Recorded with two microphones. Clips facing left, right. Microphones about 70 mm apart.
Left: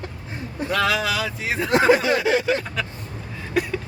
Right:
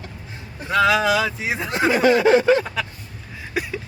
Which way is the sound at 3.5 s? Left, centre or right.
Centre.